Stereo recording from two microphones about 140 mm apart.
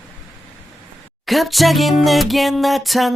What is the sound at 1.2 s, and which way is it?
Music, centre (ahead or behind).